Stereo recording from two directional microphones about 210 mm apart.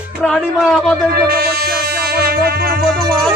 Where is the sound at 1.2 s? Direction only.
45° right (ahead or behind).